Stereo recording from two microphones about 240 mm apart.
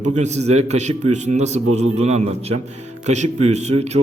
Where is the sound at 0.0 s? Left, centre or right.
Right.